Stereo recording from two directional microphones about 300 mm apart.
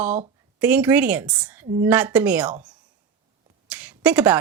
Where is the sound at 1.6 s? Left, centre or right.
Centre.